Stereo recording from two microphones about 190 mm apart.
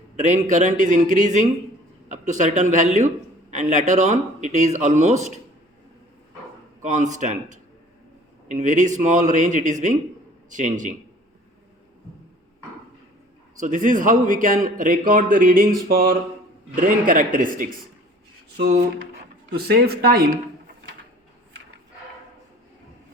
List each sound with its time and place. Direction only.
0.2 s speech: 40° right (ahead or behind)
6.8 s speech: 40° right (ahead or behind)
13.6 s a man's voice: 40° right (ahead or behind)
19.5 s speech: 55° right (ahead or behind)